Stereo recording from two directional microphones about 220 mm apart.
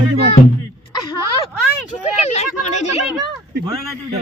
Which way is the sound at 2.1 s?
30° left (ahead or behind).